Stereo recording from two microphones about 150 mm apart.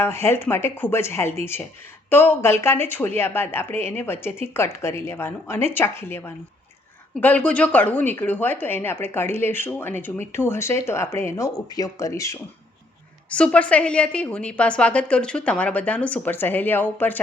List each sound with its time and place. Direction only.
0.0 s a woman's voice: 15° left (ahead or behind)
13.3 s a woman's voice: 10° left (ahead or behind)